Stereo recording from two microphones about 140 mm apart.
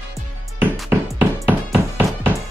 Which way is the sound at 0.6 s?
10° right (ahead or behind).